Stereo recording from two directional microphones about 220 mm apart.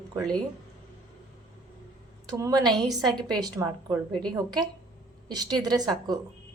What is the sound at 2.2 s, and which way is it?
Speech, 15° right (ahead or behind).